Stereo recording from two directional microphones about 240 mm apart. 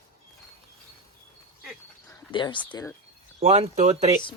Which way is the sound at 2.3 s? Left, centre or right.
Centre.